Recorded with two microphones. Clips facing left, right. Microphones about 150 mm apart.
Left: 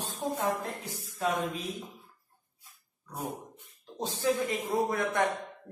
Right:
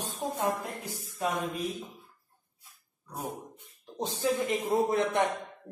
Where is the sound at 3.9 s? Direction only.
15° right (ahead or behind).